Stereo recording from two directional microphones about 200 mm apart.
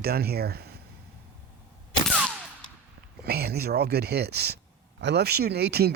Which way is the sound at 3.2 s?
50° right (ahead or behind).